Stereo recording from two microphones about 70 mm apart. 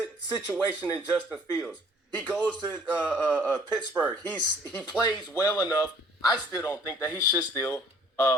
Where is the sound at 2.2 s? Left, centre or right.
Centre.